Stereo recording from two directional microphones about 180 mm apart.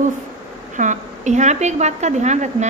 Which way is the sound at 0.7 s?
40° right (ahead or behind).